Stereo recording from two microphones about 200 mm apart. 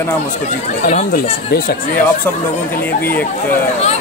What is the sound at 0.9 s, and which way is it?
Speech, 45° left (ahead or behind).